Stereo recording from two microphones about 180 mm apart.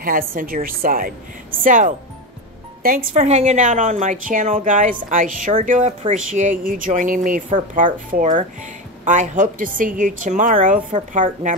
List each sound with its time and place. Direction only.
0.0 s a woman's voice: 50° right (ahead or behind)